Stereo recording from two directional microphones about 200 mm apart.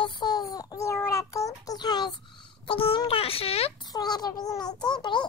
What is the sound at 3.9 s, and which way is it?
A child's voice, 20° left (ahead or behind).